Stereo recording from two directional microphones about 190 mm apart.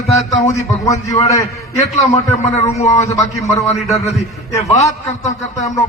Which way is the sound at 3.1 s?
15° left (ahead or behind).